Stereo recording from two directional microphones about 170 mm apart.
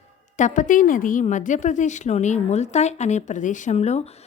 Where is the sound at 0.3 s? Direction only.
50° left (ahead or behind).